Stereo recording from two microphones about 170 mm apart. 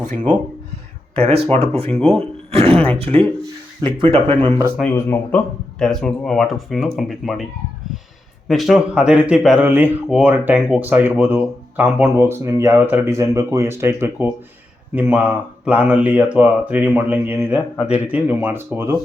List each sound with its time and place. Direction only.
1.1 s speech: 35° right (ahead or behind)
4.9 s speech: 15° left (ahead or behind)
5.8 s speech: 5° left (ahead or behind)
8.4 s speech: centre (ahead or behind)